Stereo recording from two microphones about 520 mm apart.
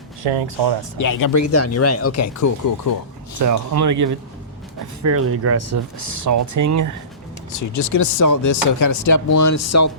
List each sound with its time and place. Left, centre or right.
0.2 s speech: right
0.9 s speech: left
3.3 s speech: right
7.7 s speech: left